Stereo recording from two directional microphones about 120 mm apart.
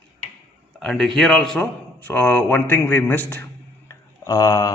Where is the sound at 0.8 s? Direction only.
5° left (ahead or behind).